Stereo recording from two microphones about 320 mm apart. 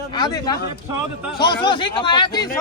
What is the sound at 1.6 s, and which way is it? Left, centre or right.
Speech, centre.